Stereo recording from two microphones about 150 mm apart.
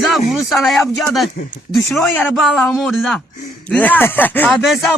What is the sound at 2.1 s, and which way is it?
Speech, 10° left (ahead or behind).